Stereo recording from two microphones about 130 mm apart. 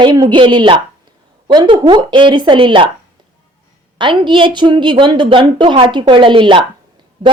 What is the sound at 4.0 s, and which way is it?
Speech, 40° right (ahead or behind).